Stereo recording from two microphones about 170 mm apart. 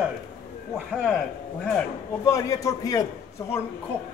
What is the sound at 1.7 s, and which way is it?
A man's voice, 15° left (ahead or behind).